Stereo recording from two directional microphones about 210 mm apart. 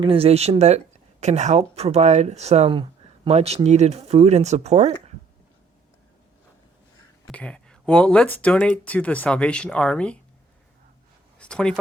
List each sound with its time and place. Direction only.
0.0 s speech: 25° right (ahead or behind)
7.3 s speech: 5° left (ahead or behind)
11.3 s speech: 5° left (ahead or behind)